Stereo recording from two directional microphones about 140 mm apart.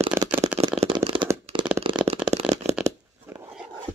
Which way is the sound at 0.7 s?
40° right (ahead or behind).